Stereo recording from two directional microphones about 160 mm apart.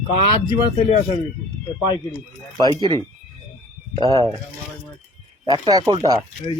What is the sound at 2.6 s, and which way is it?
Speech, 30° right (ahead or behind).